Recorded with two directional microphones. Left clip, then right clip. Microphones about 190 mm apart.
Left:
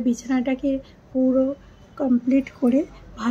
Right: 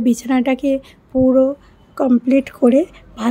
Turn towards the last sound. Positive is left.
turn(degrees=-55)  # may be behind; listen again after turning